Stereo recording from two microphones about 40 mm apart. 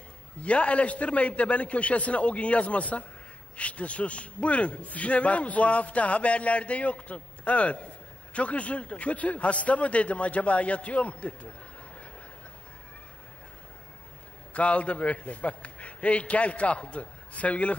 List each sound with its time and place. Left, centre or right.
0.4 s a man's voice: left
14.5 s a man's voice: left